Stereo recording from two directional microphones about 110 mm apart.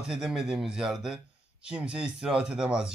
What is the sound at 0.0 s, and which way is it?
A man's voice, 5° right (ahead or behind).